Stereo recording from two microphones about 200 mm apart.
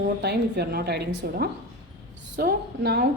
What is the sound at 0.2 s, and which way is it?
A woman's voice, 55° right (ahead or behind).